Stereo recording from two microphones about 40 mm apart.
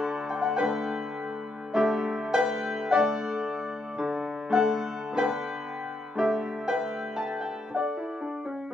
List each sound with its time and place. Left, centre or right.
0.0 s music: centre